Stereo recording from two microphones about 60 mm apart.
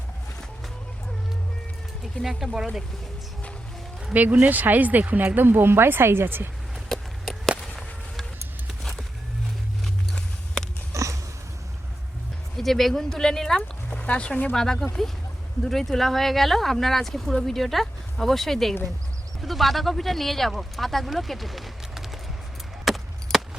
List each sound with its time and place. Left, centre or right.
2.2 s speech: centre
4.1 s speech: right
6.8 s a sound: centre
7.6 s whip: centre
8.8 s a sound: centre
10.9 s biting: right
12.5 s speech: centre
13.6 s speech: left
14.5 s speech: centre
22.9 s chop: centre
23.3 s chop: centre